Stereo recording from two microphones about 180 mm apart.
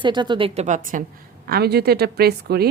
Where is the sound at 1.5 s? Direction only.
65° right (ahead or behind).